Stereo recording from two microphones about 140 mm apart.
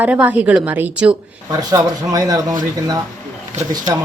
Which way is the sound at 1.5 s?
25° right (ahead or behind).